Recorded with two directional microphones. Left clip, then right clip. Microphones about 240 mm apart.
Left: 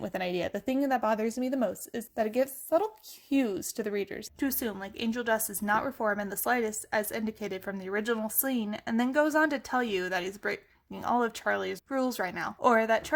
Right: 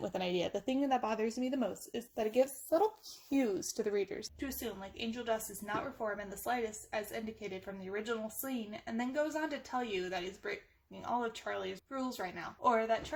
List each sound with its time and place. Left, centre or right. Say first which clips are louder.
0.0 s speech: left 4 dB; left